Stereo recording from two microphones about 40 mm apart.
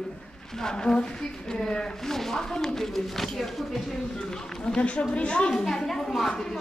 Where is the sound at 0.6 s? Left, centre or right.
Centre.